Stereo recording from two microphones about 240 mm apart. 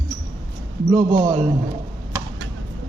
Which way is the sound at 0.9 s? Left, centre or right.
Centre.